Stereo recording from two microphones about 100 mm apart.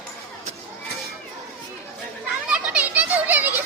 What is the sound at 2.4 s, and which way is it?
Children playing, 15° right (ahead or behind).